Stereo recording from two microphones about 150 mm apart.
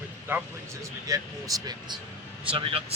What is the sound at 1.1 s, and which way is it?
Speech, 20° right (ahead or behind).